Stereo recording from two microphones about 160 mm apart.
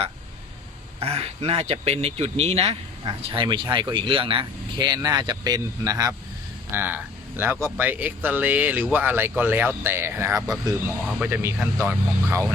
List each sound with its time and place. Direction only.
0.9 s speech: 40° right (ahead or behind); by 12.5 s 15° right (ahead or behind)